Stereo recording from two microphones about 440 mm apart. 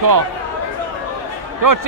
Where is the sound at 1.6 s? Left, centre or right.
Right.